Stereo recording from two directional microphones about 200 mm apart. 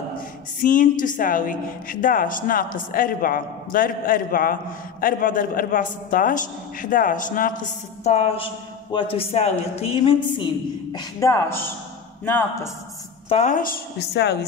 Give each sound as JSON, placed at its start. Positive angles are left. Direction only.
{"t": 0.6, "sound": "a woman's voice", "side_deg": 40}
{"t": 13.3, "sound": "a woman's voice", "side_deg": 35}